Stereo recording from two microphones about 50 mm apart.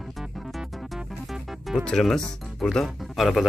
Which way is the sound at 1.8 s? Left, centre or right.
Centre.